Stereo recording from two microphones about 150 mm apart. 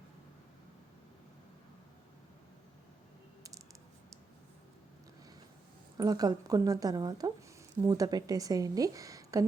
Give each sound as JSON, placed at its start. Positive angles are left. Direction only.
{"t": 6.0, "sound": "a woman's voice", "side_deg": -25}